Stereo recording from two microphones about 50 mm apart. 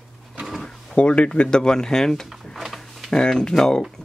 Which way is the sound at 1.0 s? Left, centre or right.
Left.